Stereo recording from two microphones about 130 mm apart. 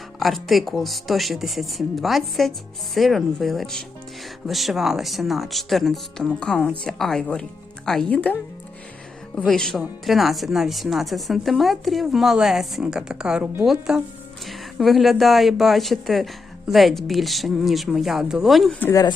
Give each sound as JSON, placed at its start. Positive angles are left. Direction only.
{"t": 0.2, "sound": "speech", "side_deg": 0}
{"t": 18.8, "sound": "speech", "side_deg": 20}